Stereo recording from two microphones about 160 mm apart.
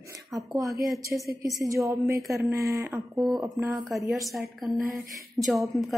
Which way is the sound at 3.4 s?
Centre (ahead or behind).